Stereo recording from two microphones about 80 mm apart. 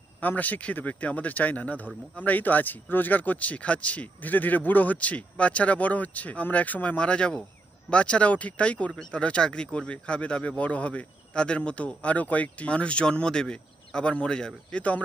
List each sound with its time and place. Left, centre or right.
0.2 s speech: left